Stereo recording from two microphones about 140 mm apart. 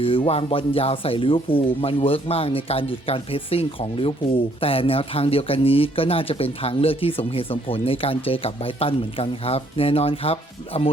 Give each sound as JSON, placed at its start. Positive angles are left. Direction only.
{"t": 0.0, "sound": "speech", "side_deg": 40}